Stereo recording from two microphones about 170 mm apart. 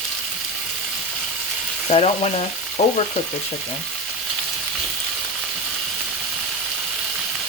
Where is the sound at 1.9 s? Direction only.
35° left (ahead or behind).